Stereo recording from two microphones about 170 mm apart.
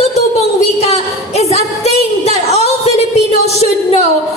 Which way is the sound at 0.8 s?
40° left (ahead or behind).